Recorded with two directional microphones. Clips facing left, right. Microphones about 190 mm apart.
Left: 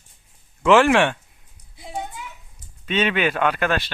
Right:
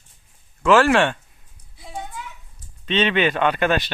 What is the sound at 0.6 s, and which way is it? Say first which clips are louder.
Speech: even; 15° left (ahead or behind).